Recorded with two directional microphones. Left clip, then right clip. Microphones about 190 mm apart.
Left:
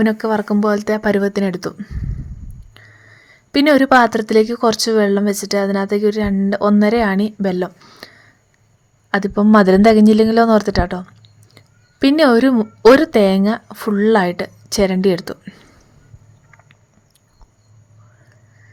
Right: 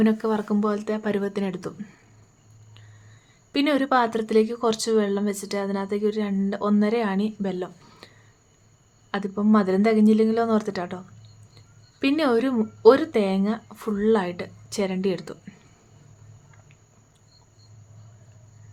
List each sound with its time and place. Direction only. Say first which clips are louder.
0.0 s speech: left 6 dB; 35° left (ahead or behind)
3.5 s speech: left 10 dB; 40° left (ahead or behind)
9.1 s a woman's voice: left 10 dB; 40° left (ahead or behind)